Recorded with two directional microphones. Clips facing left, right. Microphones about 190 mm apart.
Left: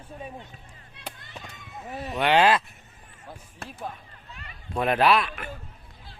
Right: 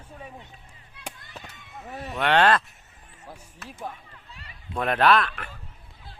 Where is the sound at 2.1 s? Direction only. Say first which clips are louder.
Even; 5° left (ahead or behind).